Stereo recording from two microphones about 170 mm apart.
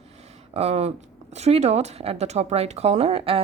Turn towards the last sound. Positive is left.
turn(degrees=-35)  # may be behind; listen again after turning